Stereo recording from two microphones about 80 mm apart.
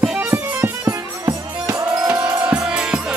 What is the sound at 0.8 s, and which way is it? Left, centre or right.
Music, right.